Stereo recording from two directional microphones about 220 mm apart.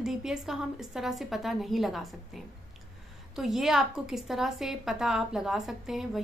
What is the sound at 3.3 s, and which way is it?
A woman's voice, centre (ahead or behind).